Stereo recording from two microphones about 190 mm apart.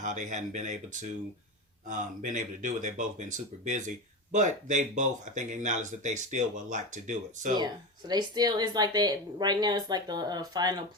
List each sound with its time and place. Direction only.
0.0 s speech: 40° right (ahead or behind)
1.9 s speech: 40° right (ahead or behind)
7.5 s speech: 20° right (ahead or behind)